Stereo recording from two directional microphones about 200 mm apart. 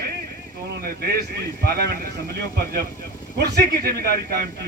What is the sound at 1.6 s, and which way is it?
Speech, 50° right (ahead or behind).